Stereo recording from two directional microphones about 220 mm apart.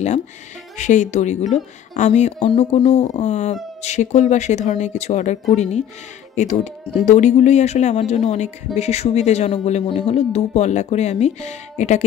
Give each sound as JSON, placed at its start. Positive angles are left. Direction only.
{"t": 0.7, "sound": "speech", "side_deg": 35}